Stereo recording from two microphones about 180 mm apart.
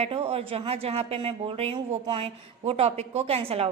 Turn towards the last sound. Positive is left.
turn(degrees=-35)  # may be behind; listen again after turning